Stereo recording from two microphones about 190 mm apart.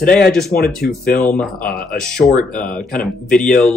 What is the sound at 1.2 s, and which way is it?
Speech, 5° left (ahead or behind).